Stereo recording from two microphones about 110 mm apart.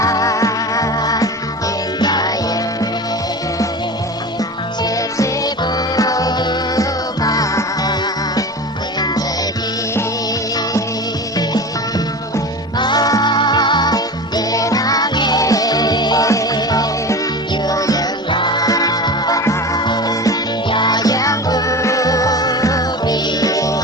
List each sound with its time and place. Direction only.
0.0 s music: 30° left (ahead or behind)
4.8 s music: 30° left (ahead or behind)
11.3 s music: 35° left (ahead or behind)
18.3 s music: 45° left (ahead or behind)